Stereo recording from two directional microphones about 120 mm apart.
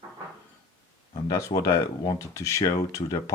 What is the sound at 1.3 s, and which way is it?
Speech, 25° left (ahead or behind).